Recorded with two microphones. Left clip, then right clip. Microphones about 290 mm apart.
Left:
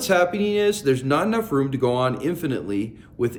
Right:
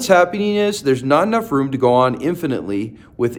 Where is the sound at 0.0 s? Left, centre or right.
Centre.